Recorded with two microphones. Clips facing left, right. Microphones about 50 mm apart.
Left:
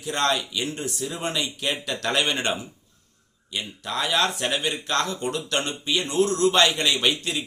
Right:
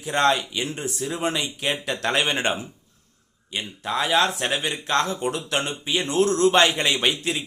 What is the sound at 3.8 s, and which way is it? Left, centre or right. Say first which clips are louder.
A man's voice: right 3 dB; centre.